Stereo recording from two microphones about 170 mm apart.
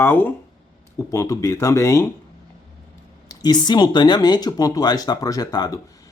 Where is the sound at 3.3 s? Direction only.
25° left (ahead or behind).